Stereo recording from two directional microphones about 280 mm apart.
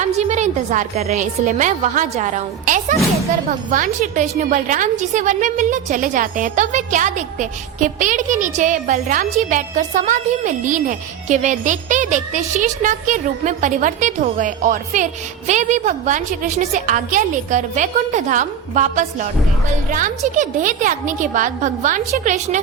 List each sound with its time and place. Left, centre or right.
0.0 s a woman's voice: right